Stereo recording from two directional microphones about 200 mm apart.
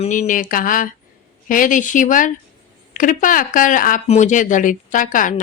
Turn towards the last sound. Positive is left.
turn(degrees=40)  # may be behind; listen again after turning